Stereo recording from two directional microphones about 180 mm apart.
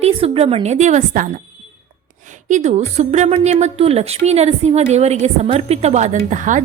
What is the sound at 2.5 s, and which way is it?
A woman's voice, 40° right (ahead or behind).